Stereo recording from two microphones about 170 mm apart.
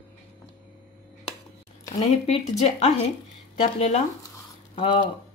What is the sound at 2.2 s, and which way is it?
Speech, 40° left (ahead or behind).